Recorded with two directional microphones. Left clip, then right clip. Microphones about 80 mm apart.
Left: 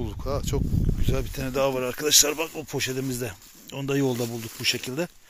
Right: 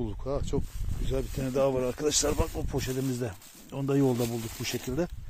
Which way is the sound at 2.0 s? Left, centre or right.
Right.